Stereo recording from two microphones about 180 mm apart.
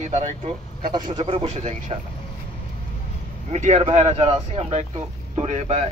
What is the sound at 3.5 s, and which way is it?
Speech, 40° right (ahead or behind).